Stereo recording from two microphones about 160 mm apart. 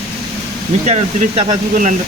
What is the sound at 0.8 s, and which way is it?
Speech, 40° right (ahead or behind).